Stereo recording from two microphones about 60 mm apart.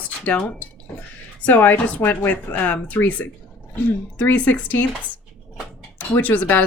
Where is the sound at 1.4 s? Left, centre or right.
Left.